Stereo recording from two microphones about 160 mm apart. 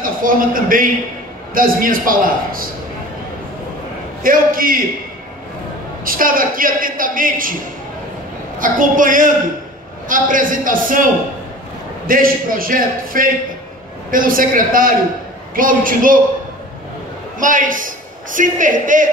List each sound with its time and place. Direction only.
0.0 s a man's voice: 60° right (ahead or behind)
4.2 s a man's voice: 60° right (ahead or behind)
6.0 s a man's voice: 60° right (ahead or behind)
8.5 s a man's voice: 55° right (ahead or behind)
12.1 s a man's voice: 60° right (ahead or behind)
17.4 s a man's voice: 55° right (ahead or behind)